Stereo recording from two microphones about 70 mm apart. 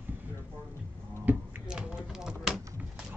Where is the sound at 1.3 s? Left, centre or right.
Right.